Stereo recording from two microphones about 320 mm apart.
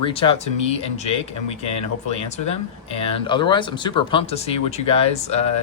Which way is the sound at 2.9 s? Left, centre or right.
Centre.